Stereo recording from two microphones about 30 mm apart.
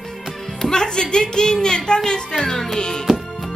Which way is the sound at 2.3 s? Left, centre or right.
Centre.